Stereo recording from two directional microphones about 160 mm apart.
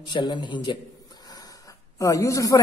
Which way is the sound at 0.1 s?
30° left (ahead or behind).